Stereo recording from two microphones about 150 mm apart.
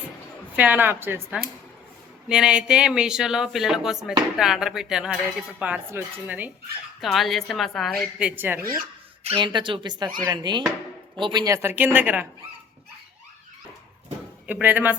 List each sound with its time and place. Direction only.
0.5 s speech: 10° right (ahead or behind)
7.0 s speech: centre (ahead or behind)
8.4 s speech: 15° right (ahead or behind)
9.2 s speech: 35° right (ahead or behind); by 12.3 s 10° right (ahead or behind)
14.4 s speech: 10° right (ahead or behind)